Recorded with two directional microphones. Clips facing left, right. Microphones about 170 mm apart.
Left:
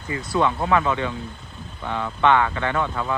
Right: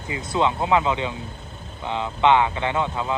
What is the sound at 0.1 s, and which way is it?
Speech, 20° right (ahead or behind).